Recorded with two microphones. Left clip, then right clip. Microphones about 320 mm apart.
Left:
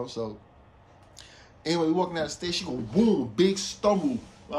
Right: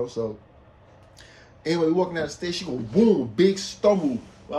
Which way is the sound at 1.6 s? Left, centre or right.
Centre.